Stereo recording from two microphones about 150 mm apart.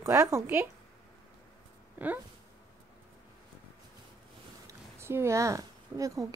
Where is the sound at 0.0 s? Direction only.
20° right (ahead or behind).